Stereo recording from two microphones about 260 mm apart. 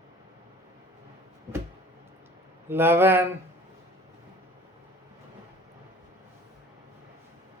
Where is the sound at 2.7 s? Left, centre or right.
Centre.